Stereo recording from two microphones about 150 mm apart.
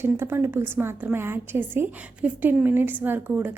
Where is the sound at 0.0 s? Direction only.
15° right (ahead or behind).